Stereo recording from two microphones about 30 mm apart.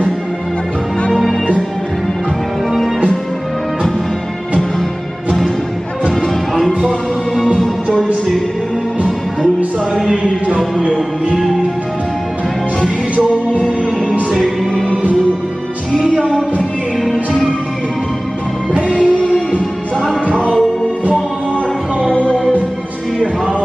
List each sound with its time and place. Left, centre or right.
17.1 s music: centre
18.9 s music: left
22.1 s music: left